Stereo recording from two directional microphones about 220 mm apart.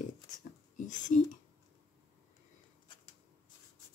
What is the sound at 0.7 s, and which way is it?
Whispering, 35° left (ahead or behind).